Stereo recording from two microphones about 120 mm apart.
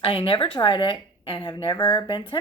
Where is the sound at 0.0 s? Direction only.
50° left (ahead or behind).